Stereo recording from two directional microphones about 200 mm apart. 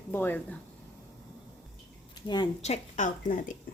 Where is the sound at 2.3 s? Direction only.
20° left (ahead or behind).